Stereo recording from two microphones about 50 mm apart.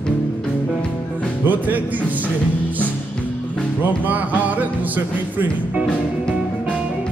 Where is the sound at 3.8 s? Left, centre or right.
Right.